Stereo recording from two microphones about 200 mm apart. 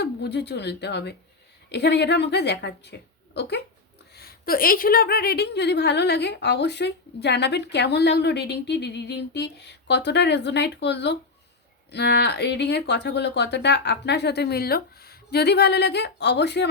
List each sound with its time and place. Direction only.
0.0 s a woman's voice: 55° left (ahead or behind)